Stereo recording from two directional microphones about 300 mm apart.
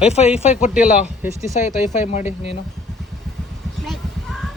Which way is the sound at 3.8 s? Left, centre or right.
Centre.